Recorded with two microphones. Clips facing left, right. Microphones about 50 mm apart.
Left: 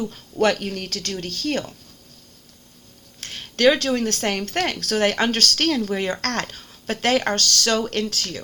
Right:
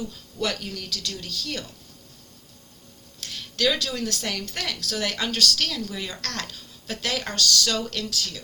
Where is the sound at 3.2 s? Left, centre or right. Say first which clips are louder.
Left 7 dB; left.